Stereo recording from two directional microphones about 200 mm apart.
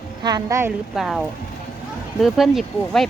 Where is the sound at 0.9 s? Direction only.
Centre (ahead or behind).